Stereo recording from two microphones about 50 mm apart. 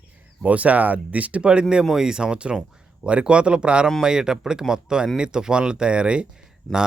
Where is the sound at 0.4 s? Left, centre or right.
Right.